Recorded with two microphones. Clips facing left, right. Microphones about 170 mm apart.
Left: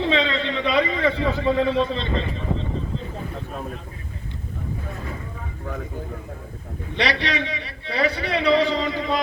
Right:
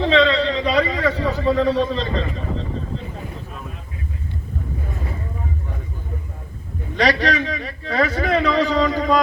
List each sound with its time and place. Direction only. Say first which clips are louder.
0.0 s a man's voice: right 6 dB; 35° right (ahead or behind)
6.9 s a man's voice: right 5 dB; 45° right (ahead or behind)